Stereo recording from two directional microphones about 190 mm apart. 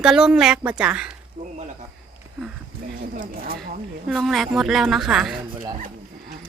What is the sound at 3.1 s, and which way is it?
Speech, 50° right (ahead or behind).